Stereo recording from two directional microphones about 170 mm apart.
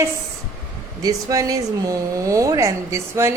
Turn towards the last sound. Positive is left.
turn(degrees=-15)  # may be behind; listen again after turning